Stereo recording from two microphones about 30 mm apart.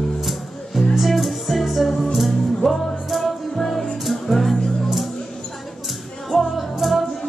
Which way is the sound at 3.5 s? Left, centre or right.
Centre.